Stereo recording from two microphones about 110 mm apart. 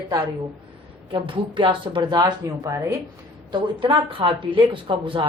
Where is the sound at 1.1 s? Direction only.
50° right (ahead or behind); by 3.0 s 30° right (ahead or behind).